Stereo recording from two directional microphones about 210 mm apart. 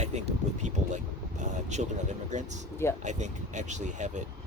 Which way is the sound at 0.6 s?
35° right (ahead or behind).